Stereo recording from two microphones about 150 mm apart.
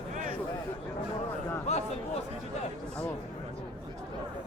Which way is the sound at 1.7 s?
50° left (ahead or behind).